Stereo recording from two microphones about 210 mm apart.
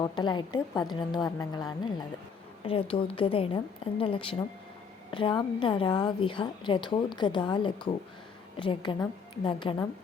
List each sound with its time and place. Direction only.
0.0 s a woman's voice: 20° left (ahead or behind)